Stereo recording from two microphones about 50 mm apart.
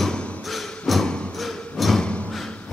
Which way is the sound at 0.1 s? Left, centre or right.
Left.